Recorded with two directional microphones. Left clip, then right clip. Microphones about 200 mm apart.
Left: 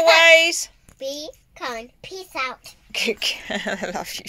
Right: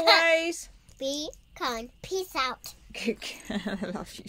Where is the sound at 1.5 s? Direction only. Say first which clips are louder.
Left 2 dB; 20° right (ahead or behind).